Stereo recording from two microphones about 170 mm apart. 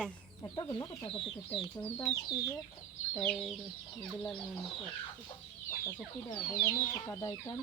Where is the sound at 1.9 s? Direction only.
10° left (ahead or behind).